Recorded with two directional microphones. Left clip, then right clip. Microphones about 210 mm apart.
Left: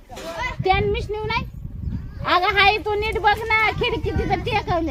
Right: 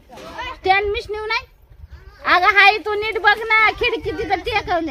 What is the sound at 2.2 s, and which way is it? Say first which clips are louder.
A woman's voice: right 4 dB; 5° left (ahead or behind).